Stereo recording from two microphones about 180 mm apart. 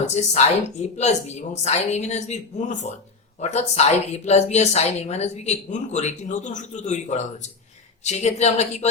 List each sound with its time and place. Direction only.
0.0 s speech: 40° left (ahead or behind)